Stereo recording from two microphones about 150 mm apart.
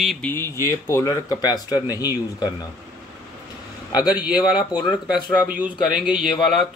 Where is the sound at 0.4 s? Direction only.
15° left (ahead or behind).